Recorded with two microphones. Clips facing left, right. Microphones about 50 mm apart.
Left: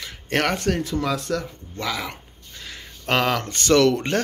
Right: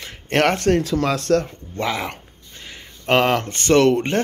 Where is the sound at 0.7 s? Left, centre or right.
Right.